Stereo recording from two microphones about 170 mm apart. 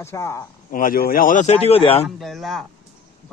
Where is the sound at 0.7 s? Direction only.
55° left (ahead or behind); by 2.0 s 35° left (ahead or behind).